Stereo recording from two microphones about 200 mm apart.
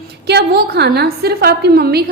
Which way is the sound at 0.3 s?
55° right (ahead or behind).